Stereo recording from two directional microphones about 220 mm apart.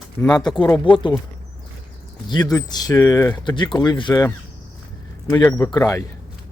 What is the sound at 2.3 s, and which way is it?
Speech, 15° left (ahead or behind).